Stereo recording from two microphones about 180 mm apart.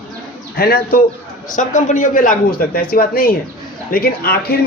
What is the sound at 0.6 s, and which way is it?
Speech, 60° left (ahead or behind).